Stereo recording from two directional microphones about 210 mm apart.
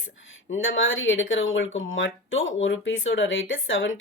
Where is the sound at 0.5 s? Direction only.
65° left (ahead or behind).